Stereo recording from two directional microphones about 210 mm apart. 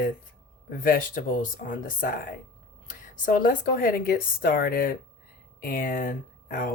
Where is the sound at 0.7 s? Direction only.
40° left (ahead or behind).